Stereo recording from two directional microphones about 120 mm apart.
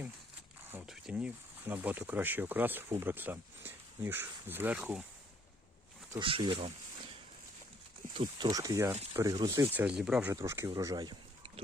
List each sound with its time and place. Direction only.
1.1 s speech: 15° right (ahead or behind)
6.1 s speech: 45° right (ahead or behind)
8.1 s speech: 40° right (ahead or behind)
9.7 s speech: 10° right (ahead or behind)
10.2 s speech: 25° right (ahead or behind)